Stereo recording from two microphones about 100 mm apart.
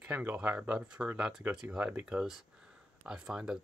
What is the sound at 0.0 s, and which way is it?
Speech, 15° right (ahead or behind).